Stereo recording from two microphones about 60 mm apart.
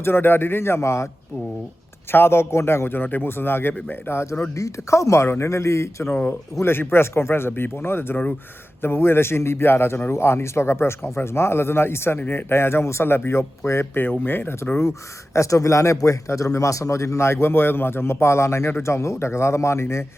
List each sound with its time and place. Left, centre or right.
0.0 s a man's voice: left
2.1 s a man's voice: left
4.5 s speech: left
6.6 s speech: left
13.9 s speech: left